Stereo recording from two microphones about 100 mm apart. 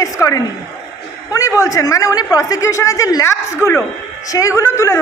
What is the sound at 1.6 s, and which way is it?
A woman's voice, 35° left (ahead or behind).